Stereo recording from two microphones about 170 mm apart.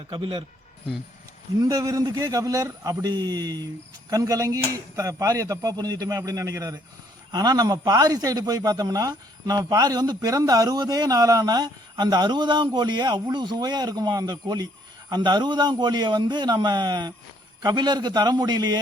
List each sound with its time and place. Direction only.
0.1 s a man's voice: 30° right (ahead or behind)
1.6 s a man's voice: 20° right (ahead or behind)